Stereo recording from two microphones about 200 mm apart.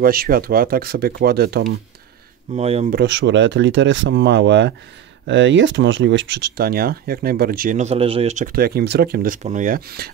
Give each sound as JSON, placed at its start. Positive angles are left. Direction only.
{"t": 0.0, "sound": "speech", "side_deg": -45}
{"t": 2.5, "sound": "speech", "side_deg": -35}
{"t": 2.9, "sound": "speech", "side_deg": -60}